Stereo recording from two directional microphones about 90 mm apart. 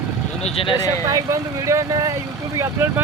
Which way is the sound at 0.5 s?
80° left.